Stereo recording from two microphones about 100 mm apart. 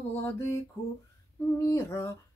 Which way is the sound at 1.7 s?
30° left (ahead or behind).